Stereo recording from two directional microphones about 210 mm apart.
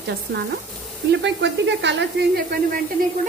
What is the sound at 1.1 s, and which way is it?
Speech, 55° right (ahead or behind).